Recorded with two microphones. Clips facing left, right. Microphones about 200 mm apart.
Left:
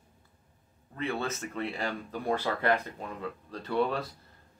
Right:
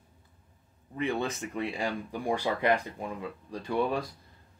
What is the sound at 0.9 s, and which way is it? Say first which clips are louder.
Speech: right 2 dB; 15° right (ahead or behind).